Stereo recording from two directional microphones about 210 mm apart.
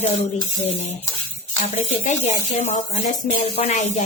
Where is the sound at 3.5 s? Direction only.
35° left (ahead or behind).